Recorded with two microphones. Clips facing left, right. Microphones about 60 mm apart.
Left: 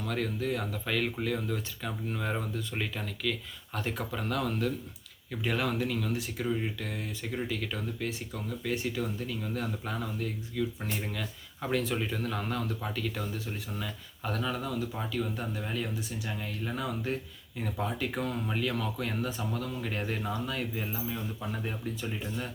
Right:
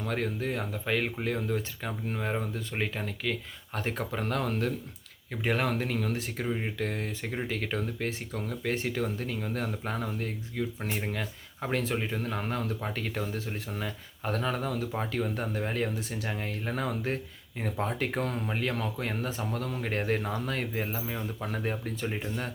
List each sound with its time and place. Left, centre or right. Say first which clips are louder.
0.0 s speech: right 1 dB; right
6.4 s speech: left 1 dB; right
6.7 s speech: right 5 dB; right